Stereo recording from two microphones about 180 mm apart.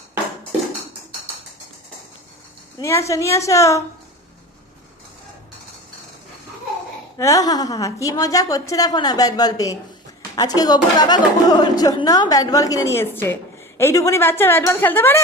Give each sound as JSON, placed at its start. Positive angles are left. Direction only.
{"t": 2.7, "sound": "a woman's voice", "side_deg": 15}
{"t": 7.2, "sound": "a woman's voice", "side_deg": 20}